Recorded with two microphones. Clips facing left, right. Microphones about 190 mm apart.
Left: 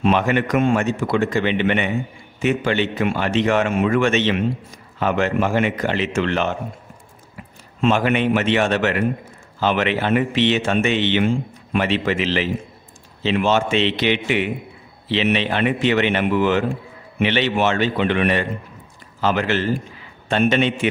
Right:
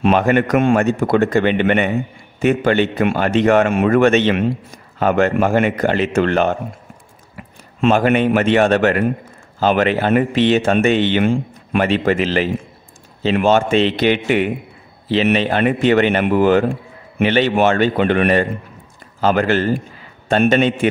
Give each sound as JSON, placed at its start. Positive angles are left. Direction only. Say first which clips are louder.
{"t": 0.0, "sound": "a man's voice", "louder": "right 4 dB", "side_deg": -50}
{"t": 7.9, "sound": "a man's voice", "louder": "right 4 dB", "side_deg": -45}